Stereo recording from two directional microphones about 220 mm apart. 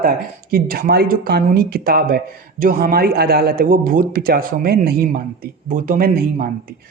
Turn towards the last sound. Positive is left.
turn(degrees=-40)  # may be behind; listen again after turning